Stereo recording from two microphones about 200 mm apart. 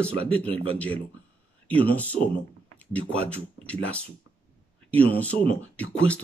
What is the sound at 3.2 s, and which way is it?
Speech, 5° left (ahead or behind).